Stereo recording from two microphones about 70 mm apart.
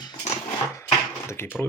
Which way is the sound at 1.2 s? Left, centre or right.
Left.